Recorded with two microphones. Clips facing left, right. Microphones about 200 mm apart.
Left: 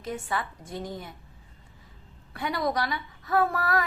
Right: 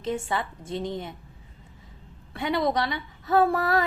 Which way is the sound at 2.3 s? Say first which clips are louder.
Right 3 dB; 25° right (ahead or behind).